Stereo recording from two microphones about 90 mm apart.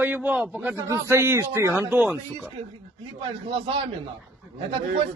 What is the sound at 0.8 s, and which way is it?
A man's voice, 30° right (ahead or behind).